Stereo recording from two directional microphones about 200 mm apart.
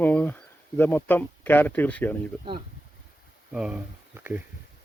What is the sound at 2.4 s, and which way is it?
Speech, 25° right (ahead or behind).